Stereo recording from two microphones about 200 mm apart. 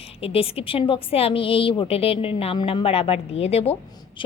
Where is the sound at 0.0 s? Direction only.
30° left (ahead or behind).